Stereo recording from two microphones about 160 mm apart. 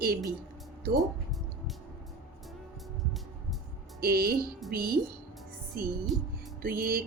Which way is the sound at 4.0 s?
70° right (ahead or behind).